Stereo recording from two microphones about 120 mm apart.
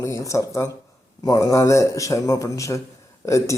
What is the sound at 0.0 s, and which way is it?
Speech, 25° left (ahead or behind).